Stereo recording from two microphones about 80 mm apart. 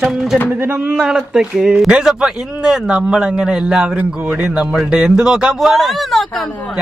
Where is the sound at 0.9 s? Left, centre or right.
Centre.